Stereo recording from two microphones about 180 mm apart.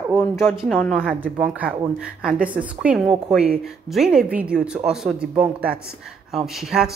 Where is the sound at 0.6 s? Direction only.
Centre (ahead or behind).